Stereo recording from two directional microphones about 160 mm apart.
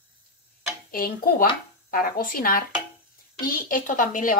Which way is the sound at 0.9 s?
65° left (ahead or behind).